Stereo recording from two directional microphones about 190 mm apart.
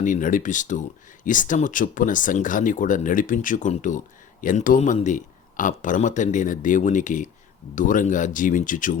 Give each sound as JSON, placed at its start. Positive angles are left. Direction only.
{"t": 0.0, "sound": "speech", "side_deg": 45}